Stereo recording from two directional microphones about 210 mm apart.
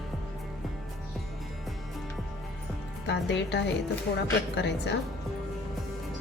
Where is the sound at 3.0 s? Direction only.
55° left (ahead or behind).